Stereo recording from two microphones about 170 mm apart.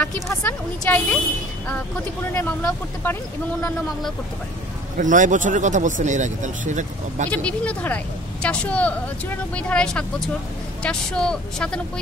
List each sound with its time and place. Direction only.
0.0 s a woman's voice: 10° left (ahead or behind)
2.6 s a woman's voice: 10° left (ahead or behind)
4.9 s speech: 50° right (ahead or behind)
7.2 s a woman's voice: 10° left (ahead or behind)